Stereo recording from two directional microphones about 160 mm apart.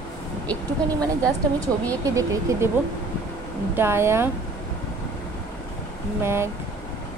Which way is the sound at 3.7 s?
15° right (ahead or behind).